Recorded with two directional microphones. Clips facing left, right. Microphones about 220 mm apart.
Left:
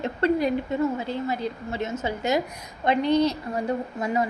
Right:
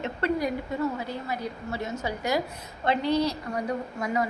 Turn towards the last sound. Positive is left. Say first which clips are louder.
# left 3 dB
turn(degrees=25)  # may be behind; listen again after turning